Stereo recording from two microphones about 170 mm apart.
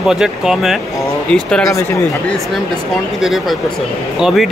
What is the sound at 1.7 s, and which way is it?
Speech, 15° left (ahead or behind).